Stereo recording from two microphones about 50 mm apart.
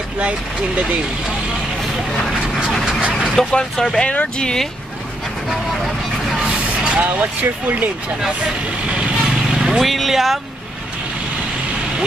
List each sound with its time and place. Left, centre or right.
0.2 s speech: right
2.8 s a sound: centre
3.5 s speech: centre
6.4 s vehicle: centre
7.2 s speech: right
8.9 s vehicle: centre
9.8 s speech: centre